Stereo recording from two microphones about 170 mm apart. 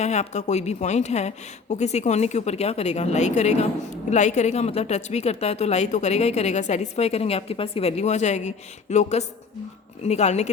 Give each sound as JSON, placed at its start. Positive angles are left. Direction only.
{"t": 0.0, "sound": "a woman's voice", "side_deg": 40}